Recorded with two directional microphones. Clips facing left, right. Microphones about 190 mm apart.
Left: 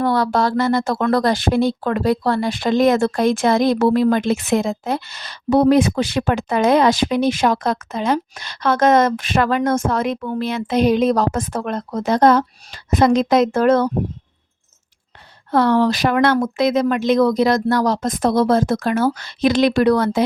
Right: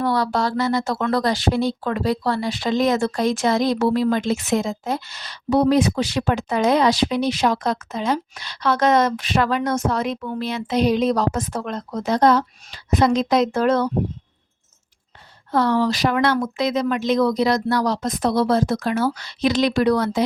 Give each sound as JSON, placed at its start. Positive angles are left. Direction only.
{"t": 0.0, "sound": "speech", "side_deg": 50}
{"t": 15.5, "sound": "speech", "side_deg": 60}